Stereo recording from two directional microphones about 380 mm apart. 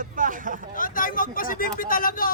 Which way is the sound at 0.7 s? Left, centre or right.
Left.